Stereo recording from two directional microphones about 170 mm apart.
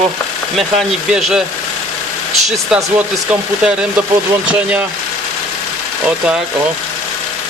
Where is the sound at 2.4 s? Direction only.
Centre (ahead or behind).